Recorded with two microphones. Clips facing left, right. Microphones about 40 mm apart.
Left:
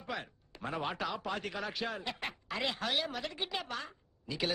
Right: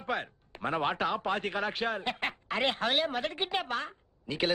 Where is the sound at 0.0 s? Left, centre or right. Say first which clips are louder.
Right 7 dB; right.